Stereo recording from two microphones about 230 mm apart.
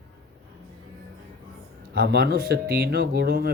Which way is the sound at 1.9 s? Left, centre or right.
Right.